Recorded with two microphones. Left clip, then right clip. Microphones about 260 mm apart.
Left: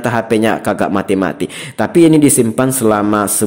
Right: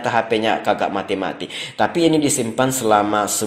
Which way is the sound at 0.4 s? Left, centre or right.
Left.